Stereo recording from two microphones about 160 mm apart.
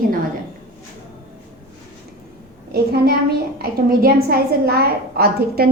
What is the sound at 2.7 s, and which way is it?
Speech, 85° right.